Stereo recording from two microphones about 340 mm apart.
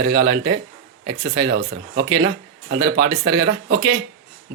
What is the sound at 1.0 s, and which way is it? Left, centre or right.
Speech, right.